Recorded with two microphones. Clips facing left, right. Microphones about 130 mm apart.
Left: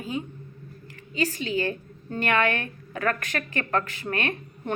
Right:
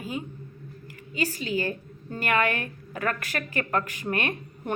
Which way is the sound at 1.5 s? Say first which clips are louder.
Left 1 dB; 10° right (ahead or behind).